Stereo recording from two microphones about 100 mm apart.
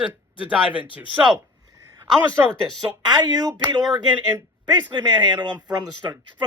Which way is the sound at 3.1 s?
45° right (ahead or behind).